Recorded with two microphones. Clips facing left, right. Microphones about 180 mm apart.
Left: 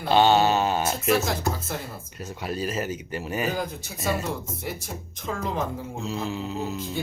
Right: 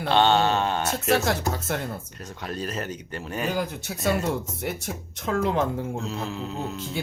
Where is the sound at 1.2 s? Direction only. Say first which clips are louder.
Right 2 dB; 70° right (ahead or behind).